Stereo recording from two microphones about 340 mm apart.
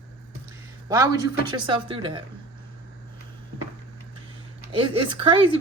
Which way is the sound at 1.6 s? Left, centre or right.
Centre.